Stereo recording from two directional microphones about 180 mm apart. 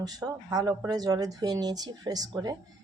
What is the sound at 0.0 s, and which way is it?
Speech, 20° right (ahead or behind).